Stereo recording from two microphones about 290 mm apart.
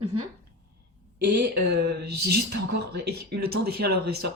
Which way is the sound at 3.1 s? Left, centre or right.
Right.